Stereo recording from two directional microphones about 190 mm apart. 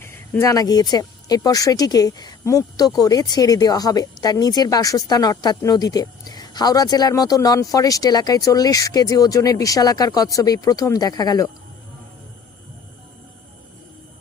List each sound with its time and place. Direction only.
0.0 s speech: 15° left (ahead or behind)